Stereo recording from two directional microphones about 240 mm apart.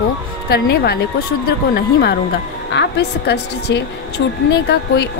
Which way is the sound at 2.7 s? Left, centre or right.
Left.